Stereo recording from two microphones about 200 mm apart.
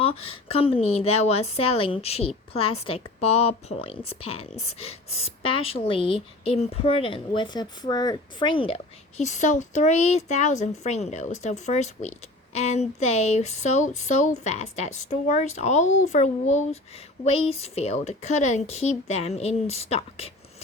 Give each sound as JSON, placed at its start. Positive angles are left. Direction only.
{"t": 0.0, "sound": "a woman's voice", "side_deg": 30}